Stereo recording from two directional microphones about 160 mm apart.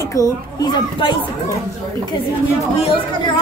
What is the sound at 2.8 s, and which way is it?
Speech, 35° left (ahead or behind).